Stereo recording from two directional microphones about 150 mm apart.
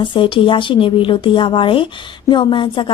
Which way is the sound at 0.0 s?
35° left (ahead or behind).